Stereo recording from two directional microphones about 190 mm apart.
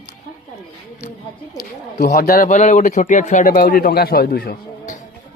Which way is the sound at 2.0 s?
55° left (ahead or behind).